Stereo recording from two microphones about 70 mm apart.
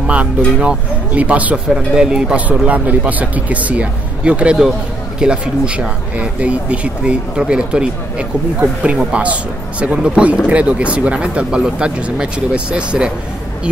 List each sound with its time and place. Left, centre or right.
0.0 s speech: centre
1.7 s speech: centre
2.4 s speech: right